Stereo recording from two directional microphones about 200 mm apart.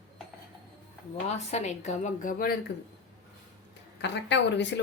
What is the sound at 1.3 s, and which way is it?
A woman's voice, 35° left (ahead or behind).